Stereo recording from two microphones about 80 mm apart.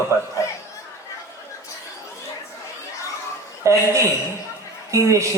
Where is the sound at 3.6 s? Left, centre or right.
Right.